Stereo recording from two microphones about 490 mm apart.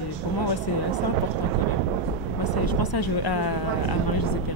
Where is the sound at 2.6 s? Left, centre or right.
Left.